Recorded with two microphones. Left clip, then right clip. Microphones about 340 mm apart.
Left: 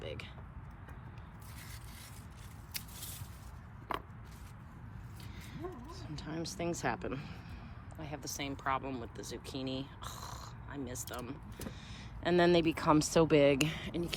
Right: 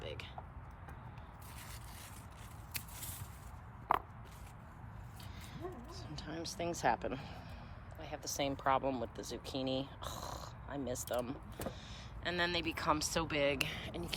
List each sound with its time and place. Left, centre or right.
0.0 s vehicle: centre
5.5 s speech: centre